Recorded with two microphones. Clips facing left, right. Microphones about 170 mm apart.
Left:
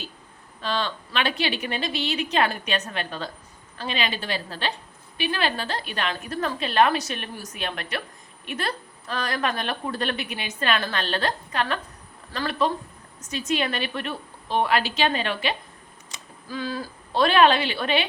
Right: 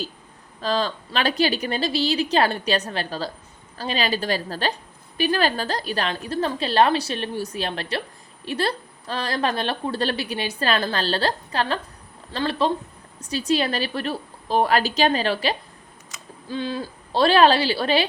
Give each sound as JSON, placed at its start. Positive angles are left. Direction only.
{"t": 0.6, "sound": "a woman's voice", "side_deg": -40}
{"t": 16.5, "sound": "a woman's voice", "side_deg": -25}